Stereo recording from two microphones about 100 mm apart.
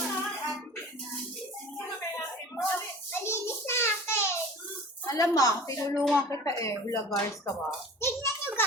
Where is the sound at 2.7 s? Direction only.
25° left (ahead or behind).